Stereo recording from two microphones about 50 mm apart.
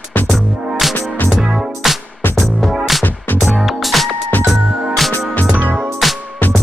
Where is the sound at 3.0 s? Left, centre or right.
Left.